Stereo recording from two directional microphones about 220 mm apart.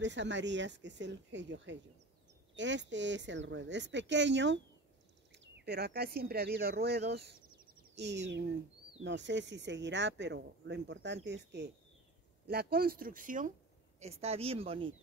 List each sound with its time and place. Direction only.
0.0 s a woman's voice: 55° right (ahead or behind); by 14.9 s 25° right (ahead or behind)